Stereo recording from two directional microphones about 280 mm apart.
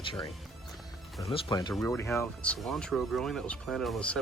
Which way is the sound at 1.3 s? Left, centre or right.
Centre.